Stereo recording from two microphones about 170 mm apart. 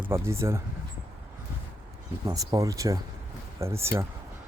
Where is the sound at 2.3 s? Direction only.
20° right (ahead or behind).